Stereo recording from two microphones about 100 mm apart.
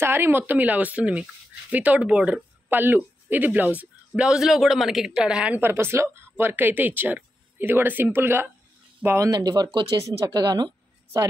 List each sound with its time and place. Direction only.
0.0 s speech: 20° right (ahead or behind)
4.1 s speech: 5° right (ahead or behind)
5.6 s speech: 25° right (ahead or behind)
9.3 s speech: 40° right (ahead or behind)